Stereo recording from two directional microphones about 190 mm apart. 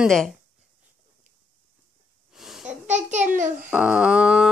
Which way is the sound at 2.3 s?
Centre (ahead or behind).